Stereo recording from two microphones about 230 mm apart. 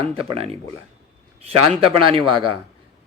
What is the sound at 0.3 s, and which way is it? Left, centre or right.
A man's voice, right.